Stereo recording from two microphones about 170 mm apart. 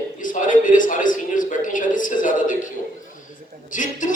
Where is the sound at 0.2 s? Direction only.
50° left (ahead or behind).